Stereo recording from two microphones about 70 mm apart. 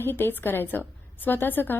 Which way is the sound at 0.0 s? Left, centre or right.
Left.